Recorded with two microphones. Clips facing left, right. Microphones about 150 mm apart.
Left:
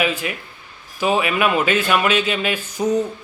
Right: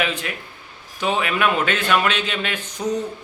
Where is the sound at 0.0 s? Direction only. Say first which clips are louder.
Left 3 dB; 10° left (ahead or behind).